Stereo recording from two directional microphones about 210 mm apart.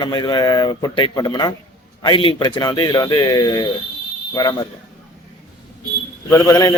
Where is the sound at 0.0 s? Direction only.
20° left (ahead or behind).